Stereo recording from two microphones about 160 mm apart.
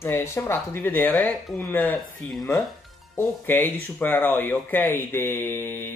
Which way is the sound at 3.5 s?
10° left (ahead or behind).